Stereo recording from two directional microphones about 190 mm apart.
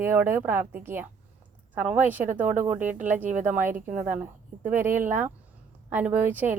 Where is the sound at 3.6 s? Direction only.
45° right (ahead or behind).